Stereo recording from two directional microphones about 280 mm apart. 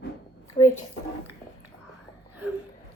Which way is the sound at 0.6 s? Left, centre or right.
Left.